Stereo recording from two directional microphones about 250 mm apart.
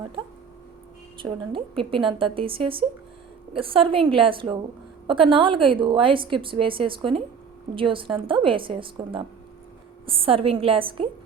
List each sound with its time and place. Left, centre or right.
1.2 s a woman's voice: right